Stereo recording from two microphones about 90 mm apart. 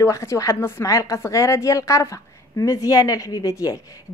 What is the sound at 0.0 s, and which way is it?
A woman's voice, 30° left (ahead or behind).